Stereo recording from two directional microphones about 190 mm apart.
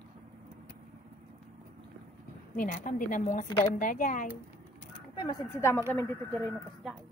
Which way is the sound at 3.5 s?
25° left (ahead or behind).